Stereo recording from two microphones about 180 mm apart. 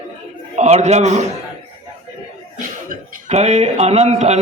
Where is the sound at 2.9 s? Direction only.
40° right (ahead or behind).